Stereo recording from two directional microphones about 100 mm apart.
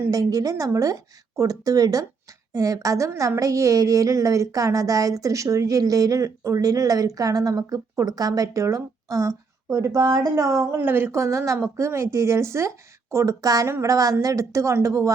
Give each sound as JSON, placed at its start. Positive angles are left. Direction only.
{"t": 0.1, "sound": "a woman's voice", "side_deg": -35}